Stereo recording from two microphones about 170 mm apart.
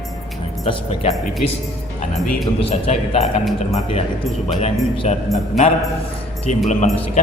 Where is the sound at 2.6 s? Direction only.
35° left (ahead or behind).